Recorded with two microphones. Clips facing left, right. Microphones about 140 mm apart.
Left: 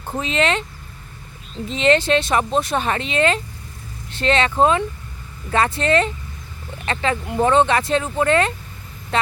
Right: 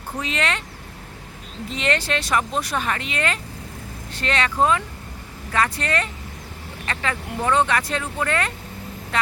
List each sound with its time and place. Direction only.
0.2 s speech: 25° left (ahead or behind)
1.7 s speech: 25° left (ahead or behind)